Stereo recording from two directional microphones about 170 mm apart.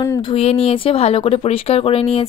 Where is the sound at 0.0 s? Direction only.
30° left (ahead or behind).